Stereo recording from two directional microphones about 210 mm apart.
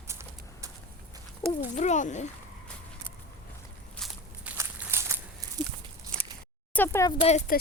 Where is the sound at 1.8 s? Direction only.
35° left (ahead or behind).